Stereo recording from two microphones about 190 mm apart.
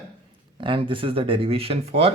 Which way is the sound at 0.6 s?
25° right (ahead or behind).